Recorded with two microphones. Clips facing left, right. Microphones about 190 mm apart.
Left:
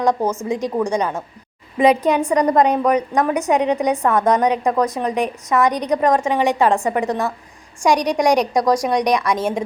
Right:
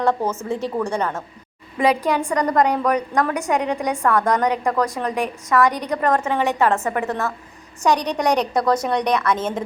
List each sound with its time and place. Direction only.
0.0 s a woman's voice: 15° left (ahead or behind)